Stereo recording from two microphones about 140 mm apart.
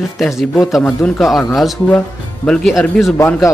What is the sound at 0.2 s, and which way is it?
Speech, centre (ahead or behind).